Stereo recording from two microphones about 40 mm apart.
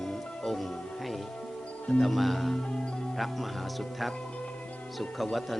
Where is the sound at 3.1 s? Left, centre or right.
Centre.